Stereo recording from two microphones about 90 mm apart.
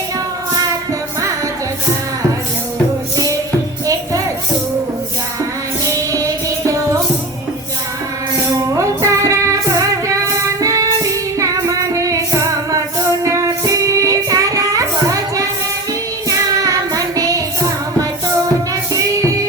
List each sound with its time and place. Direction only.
5.8 s music: 40° right (ahead or behind)
8.7 s music: 35° right (ahead or behind)
16.6 s child singing: 40° right (ahead or behind)